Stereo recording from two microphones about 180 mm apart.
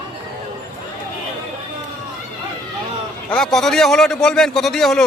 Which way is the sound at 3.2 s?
5° left (ahead or behind).